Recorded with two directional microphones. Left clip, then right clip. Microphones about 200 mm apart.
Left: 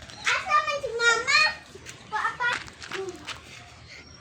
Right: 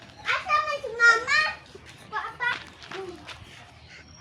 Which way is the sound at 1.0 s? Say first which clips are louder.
Right 3 dB; 15° left (ahead or behind).